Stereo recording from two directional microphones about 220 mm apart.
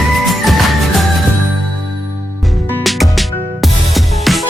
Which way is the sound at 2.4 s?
Centre (ahead or behind).